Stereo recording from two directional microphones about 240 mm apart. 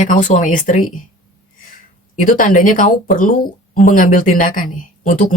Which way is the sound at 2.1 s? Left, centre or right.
Left.